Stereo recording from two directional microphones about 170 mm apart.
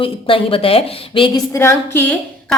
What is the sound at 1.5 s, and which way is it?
Speech, 15° left (ahead or behind).